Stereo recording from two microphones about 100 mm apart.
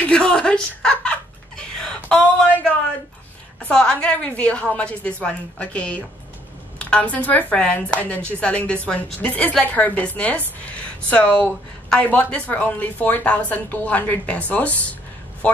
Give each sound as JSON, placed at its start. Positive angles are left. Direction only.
{"t": 0.0, "sound": "chuckle", "side_deg": 10}
{"t": 1.8, "sound": "a sound", "side_deg": 10}
{"t": 3.6, "sound": "speech", "side_deg": 10}